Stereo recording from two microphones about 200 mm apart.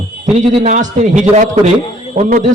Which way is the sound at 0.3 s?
40° right (ahead or behind).